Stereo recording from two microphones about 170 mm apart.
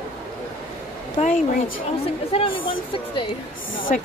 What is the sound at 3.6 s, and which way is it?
Speech, 55° left (ahead or behind).